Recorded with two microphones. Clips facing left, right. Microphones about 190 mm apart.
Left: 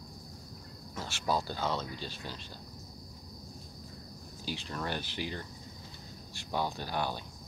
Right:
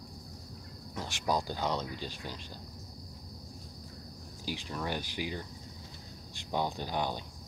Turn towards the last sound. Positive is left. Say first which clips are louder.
# right 1 dB
turn(degrees=-20)  # may be behind; listen again after turning